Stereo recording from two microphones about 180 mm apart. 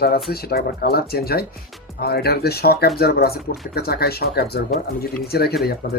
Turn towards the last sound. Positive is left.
turn(degrees=55)  # may be behind; listen again after turning